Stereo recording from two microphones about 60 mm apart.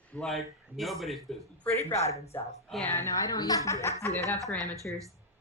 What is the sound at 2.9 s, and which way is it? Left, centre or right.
A woman's voice, left.